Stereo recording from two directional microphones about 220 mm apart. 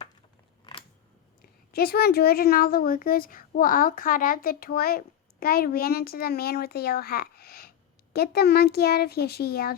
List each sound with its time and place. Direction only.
0.6 s scissors: 20° left (ahead or behind)
1.4 s a woman's voice: 45° left (ahead or behind)